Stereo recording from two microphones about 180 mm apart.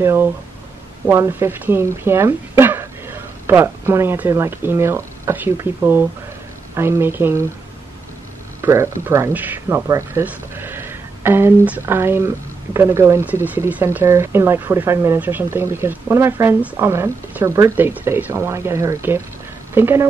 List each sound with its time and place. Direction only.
0.0 s speech: 15° right (ahead or behind)
8.5 s speech: 15° right (ahead or behind)